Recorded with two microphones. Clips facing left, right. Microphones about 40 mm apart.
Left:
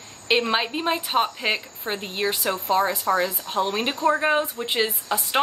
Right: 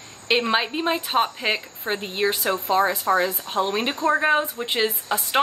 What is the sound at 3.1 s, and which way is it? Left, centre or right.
Speech, right.